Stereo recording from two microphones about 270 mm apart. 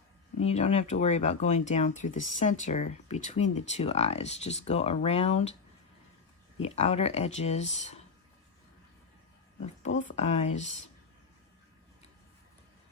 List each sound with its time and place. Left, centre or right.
0.4 s speech: left
6.6 s speech: left
10.0 s speech: left